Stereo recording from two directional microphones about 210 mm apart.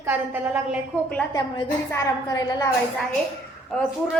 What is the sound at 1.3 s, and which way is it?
A woman's voice, 15° left (ahead or behind).